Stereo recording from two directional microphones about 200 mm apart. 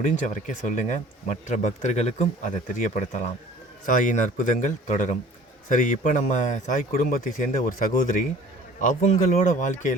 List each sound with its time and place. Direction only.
0.0 s speech: 40° left (ahead or behind)